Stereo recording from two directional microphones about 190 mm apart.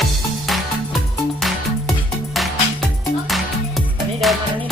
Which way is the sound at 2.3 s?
Centre (ahead or behind).